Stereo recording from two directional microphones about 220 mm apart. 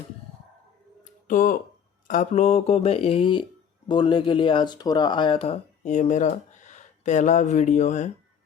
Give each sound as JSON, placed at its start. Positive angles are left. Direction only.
{"t": 1.3, "sound": "speech", "side_deg": 40}